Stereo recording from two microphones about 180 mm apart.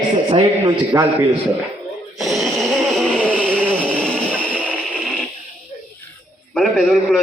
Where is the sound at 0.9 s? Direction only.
15° right (ahead or behind).